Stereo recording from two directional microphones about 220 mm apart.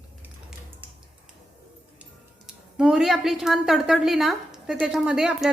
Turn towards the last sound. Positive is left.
turn(degrees=0)  # may be behind; listen again after turning